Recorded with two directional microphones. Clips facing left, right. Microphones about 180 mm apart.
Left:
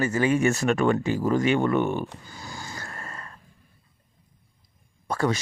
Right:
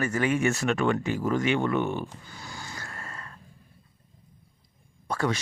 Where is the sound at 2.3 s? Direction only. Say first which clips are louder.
Left 3 dB; 40° left (ahead or behind).